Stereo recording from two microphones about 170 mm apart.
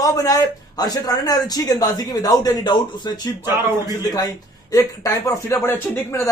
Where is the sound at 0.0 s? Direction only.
20° left (ahead or behind).